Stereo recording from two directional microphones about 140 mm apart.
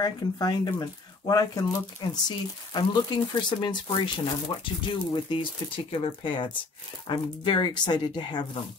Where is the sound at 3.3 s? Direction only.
35° left (ahead or behind).